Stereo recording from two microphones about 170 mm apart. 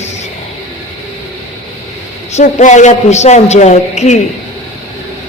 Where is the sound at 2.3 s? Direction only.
40° left (ahead or behind).